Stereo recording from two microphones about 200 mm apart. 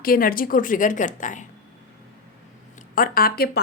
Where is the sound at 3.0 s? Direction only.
45° left (ahead or behind).